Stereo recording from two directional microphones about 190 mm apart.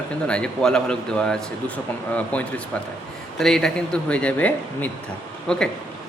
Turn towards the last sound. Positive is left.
turn(degrees=5)  # may be behind; listen again after turning